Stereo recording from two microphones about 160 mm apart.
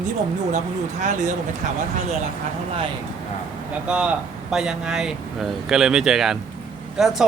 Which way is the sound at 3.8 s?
5° right (ahead or behind).